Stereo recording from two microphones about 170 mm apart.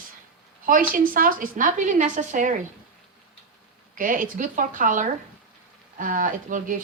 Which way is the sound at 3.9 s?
55° right (ahead or behind).